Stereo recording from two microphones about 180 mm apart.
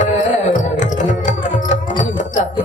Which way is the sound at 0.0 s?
45° left (ahead or behind).